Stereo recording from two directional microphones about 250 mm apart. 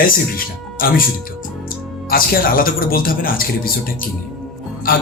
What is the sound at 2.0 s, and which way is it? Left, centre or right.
A man's voice, left.